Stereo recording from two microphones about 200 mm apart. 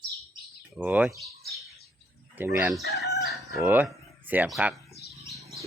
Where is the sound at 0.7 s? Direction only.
5° right (ahead or behind).